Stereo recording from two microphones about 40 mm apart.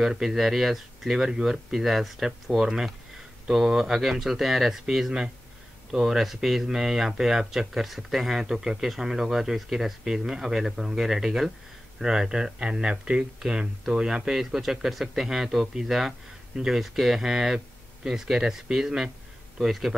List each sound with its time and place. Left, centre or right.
0.0 s speech: centre